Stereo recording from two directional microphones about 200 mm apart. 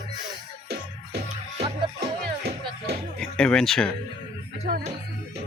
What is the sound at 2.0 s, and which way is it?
Music, 55° right (ahead or behind).